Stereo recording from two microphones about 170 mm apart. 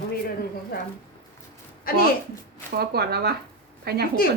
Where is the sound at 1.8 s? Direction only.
60° left (ahead or behind).